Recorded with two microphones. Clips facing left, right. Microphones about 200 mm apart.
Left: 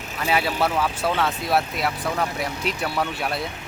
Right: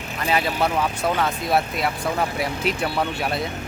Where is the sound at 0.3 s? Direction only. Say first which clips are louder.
Even; 5° left (ahead or behind).